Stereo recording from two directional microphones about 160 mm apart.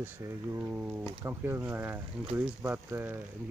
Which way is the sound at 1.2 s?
15° right (ahead or behind).